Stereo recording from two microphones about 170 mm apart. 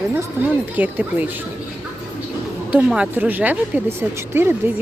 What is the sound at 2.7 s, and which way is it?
Speech, 5° right (ahead or behind).